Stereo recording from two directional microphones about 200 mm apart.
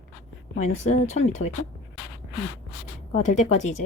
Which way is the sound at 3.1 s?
35° left (ahead or behind).